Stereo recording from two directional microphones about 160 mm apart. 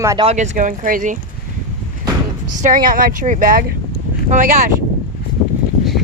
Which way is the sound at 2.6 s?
55° right (ahead or behind).